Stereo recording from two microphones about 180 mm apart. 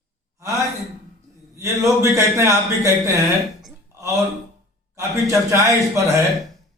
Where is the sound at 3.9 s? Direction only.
15° right (ahead or behind).